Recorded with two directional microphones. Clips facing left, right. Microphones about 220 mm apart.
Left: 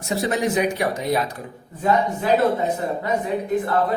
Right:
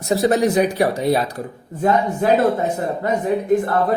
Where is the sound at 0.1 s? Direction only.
40° right (ahead or behind).